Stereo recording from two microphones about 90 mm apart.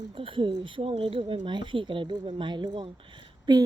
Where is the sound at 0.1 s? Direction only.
75° right (ahead or behind).